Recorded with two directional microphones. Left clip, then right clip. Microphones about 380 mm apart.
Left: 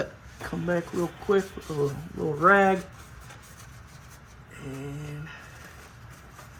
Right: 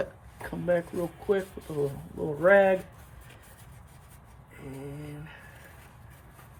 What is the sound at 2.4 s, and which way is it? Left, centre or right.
Speech, centre.